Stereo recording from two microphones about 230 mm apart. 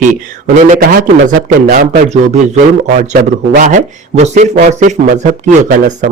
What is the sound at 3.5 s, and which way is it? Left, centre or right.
Speech, right.